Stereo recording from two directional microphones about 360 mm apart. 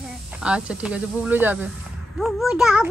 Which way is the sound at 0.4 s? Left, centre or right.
Centre.